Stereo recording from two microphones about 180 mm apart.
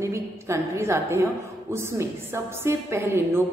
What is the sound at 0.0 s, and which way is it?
A woman's voice, 15° right (ahead or behind).